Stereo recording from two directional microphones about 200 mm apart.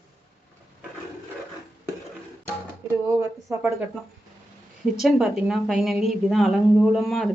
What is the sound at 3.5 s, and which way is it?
Speech, 15° right (ahead or behind).